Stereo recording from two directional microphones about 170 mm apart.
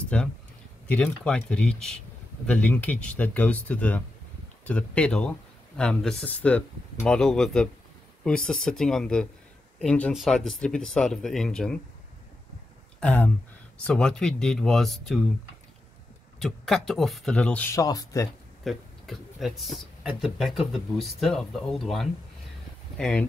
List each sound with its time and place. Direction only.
0.1 s speech: 5° left (ahead or behind)
13.0 s speech: 10° left (ahead or behind)
16.3 s speech: centre (ahead or behind)
17.7 s speech: 20° left (ahead or behind)
18.6 s speech: centre (ahead or behind)